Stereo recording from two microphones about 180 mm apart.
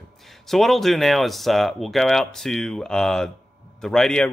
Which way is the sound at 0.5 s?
Centre (ahead or behind).